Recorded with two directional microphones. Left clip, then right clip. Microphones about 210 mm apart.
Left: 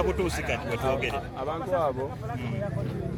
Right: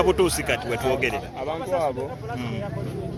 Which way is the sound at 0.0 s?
50° right (ahead or behind).